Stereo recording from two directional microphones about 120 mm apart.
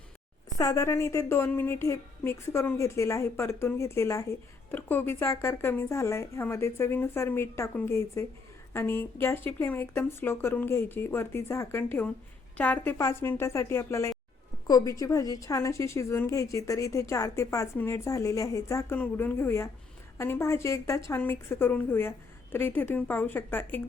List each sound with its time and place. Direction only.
0.6 s a woman's voice: 25° left (ahead or behind)